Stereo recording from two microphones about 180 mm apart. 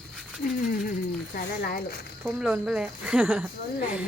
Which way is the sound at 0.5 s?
55° left (ahead or behind).